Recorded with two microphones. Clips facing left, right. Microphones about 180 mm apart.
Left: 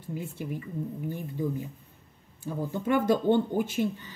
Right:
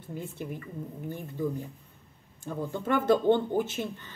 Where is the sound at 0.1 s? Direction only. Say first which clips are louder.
Left 2 dB; 10° left (ahead or behind).